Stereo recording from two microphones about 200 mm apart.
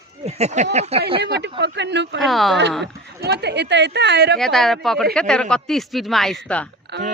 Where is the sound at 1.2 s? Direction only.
55° right (ahead or behind).